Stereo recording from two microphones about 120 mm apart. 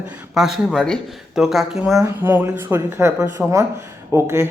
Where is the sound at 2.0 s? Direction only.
20° right (ahead or behind).